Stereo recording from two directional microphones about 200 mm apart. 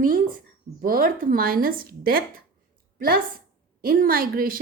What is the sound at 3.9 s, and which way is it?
Speech, 45° right (ahead or behind).